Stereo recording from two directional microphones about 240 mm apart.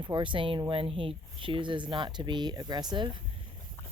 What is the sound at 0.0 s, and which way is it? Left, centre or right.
Speech, centre.